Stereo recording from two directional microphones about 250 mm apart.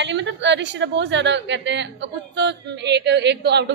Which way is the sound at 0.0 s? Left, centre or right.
Right.